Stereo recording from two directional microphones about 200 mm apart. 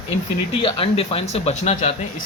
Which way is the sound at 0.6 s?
25° left (ahead or behind).